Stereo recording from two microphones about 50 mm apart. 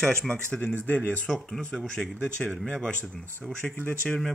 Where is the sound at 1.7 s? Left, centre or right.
Centre.